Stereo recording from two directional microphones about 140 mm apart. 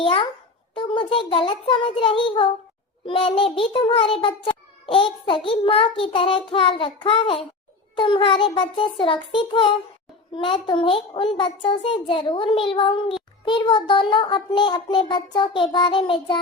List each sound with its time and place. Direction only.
0.0 s a child's voice: 40° left (ahead or behind)